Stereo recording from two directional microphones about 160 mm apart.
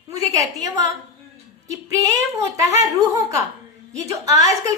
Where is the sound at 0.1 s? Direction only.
20° right (ahead or behind).